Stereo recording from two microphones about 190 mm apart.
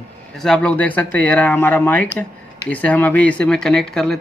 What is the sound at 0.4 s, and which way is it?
Speech, 5° left (ahead or behind).